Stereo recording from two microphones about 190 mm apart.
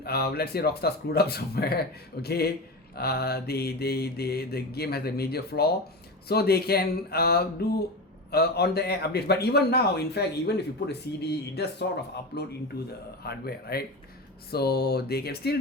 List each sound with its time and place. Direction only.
0.0 s a man's voice: 55° left (ahead or behind)
13.2 s a man's voice: 55° left (ahead or behind)